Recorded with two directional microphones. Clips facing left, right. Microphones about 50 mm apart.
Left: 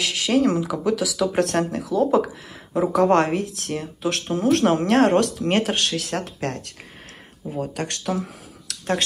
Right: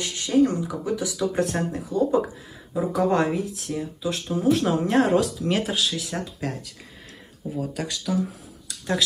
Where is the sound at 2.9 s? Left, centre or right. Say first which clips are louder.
Left 4 dB; left.